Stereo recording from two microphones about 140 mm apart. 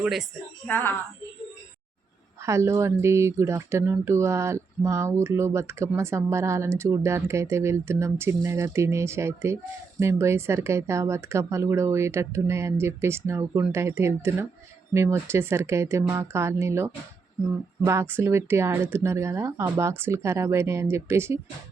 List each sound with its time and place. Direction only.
0.0 s a woman's voice: centre (ahead or behind)
0.7 s a child's voice: 15° left (ahead or behind)
2.4 s speech: 20° right (ahead or behind)